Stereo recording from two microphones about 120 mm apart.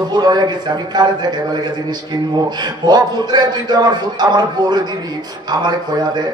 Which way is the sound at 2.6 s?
35° right (ahead or behind).